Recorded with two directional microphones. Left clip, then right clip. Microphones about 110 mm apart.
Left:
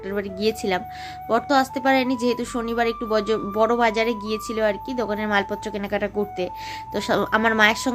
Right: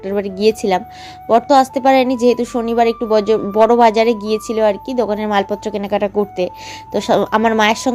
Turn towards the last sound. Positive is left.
turn(degrees=-40)  # may be behind; listen again after turning